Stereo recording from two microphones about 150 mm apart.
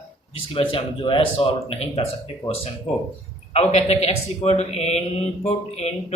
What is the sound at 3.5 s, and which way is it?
Speech, 45° left (ahead or behind).